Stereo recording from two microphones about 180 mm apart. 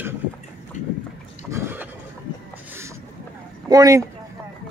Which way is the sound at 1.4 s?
15° right (ahead or behind).